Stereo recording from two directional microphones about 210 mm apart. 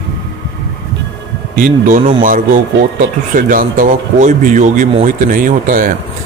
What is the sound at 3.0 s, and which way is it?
Speech, 40° right (ahead or behind).